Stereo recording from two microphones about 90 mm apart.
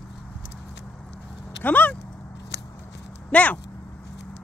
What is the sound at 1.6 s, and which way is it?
Speech, 20° left (ahead or behind).